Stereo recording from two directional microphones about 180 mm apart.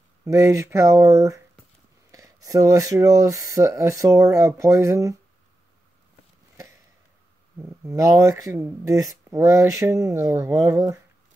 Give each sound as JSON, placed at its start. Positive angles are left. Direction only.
{"t": 0.2, "sound": "speech", "side_deg": -15}
{"t": 6.5, "sound": "a sound", "side_deg": -15}
{"t": 7.6, "sound": "speech", "side_deg": -20}